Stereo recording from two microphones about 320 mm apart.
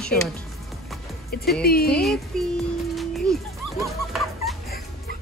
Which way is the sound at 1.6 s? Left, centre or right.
Left.